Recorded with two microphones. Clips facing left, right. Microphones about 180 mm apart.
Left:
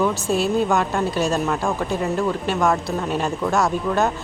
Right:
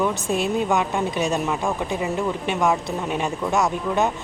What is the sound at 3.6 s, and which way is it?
Speech, 15° right (ahead or behind).